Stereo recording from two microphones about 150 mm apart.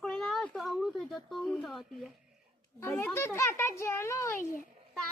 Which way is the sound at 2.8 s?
15° left (ahead or behind).